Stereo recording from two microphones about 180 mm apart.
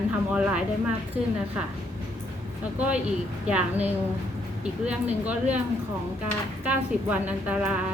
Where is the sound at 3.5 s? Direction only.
10° right (ahead or behind).